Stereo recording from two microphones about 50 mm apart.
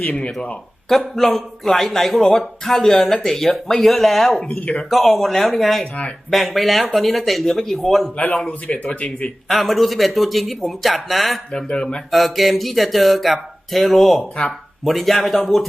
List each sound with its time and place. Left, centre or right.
0.0 s speech: left
0.9 s a man's voice: centre
8.1 s speech: left
9.5 s speech: centre
11.5 s a man's voice: centre
12.1 s speech: centre